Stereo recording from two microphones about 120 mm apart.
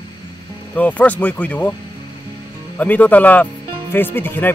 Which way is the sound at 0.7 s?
15° left (ahead or behind).